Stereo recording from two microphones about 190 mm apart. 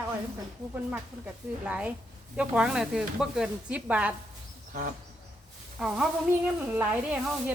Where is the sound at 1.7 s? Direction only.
5° right (ahead or behind).